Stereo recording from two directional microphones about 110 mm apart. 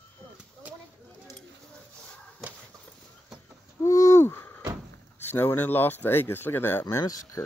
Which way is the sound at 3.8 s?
30° left (ahead or behind).